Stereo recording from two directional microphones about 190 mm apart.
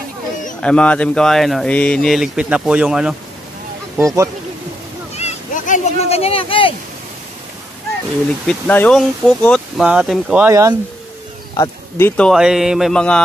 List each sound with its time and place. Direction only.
0.6 s speech: 5° left (ahead or behind)
4.0 s speech: 15° right (ahead or behind)
5.1 s a sound: 35° left (ahead or behind)
8.5 s speech: 5° left (ahead or behind)
10.5 s speech: 15° right (ahead or behind)
11.5 s a sound: 20° left (ahead or behind)
12.2 s speech: centre (ahead or behind)